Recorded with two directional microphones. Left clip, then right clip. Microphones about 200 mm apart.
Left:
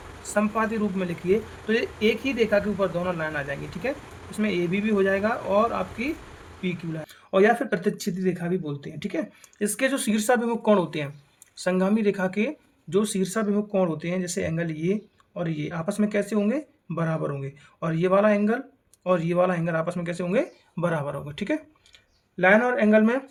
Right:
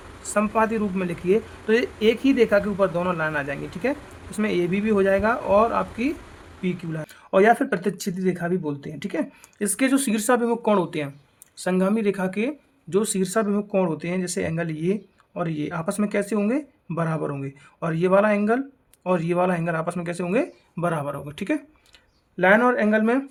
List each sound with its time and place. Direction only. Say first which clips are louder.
0.2 s speech: right 3 dB; 30° right (ahead or behind)